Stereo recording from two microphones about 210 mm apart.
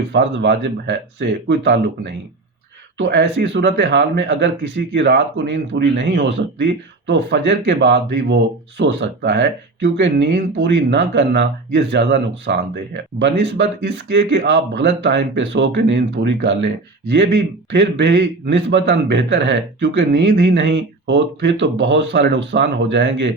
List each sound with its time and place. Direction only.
0.1 s speech: 55° right (ahead or behind)